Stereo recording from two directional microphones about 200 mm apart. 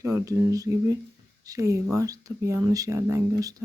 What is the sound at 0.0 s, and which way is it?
Speech, 15° right (ahead or behind).